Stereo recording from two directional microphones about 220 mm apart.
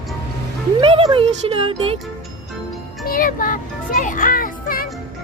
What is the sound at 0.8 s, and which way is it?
Speech, 25° right (ahead or behind).